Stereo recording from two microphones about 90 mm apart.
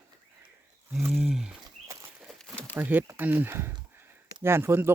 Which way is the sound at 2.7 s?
20° right (ahead or behind).